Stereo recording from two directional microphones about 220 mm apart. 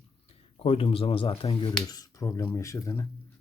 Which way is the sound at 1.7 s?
15° left (ahead or behind).